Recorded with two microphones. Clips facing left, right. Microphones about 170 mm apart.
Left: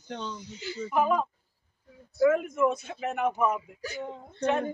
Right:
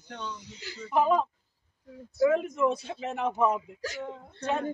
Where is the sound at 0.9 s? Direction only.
30° right (ahead or behind).